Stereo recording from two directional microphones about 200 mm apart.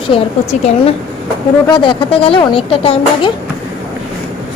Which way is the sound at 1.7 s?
25° left (ahead or behind).